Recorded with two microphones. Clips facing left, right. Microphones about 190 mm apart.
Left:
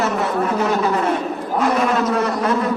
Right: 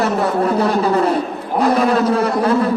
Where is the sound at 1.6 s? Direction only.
35° right (ahead or behind).